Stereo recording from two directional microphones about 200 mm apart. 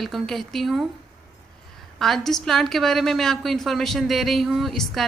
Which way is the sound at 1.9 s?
Centre (ahead or behind).